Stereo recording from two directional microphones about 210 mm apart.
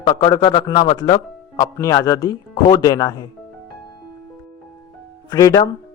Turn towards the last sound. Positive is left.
turn(degrees=15)  # may be behind; listen again after turning